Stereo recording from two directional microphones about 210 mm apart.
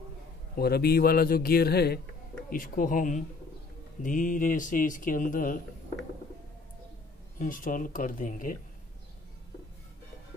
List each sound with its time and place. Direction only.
0.6 s a man's voice: 50° left (ahead or behind)
7.3 s speech: 40° left (ahead or behind)